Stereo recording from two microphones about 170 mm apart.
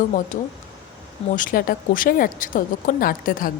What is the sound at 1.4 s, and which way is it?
A woman's voice, 55° left (ahead or behind).